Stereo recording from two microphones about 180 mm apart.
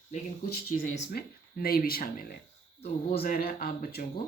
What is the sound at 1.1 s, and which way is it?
Speech, 55° left (ahead or behind).